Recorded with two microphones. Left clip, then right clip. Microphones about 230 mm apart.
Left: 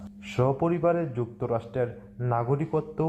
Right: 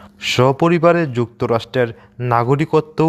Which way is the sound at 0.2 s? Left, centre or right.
Right.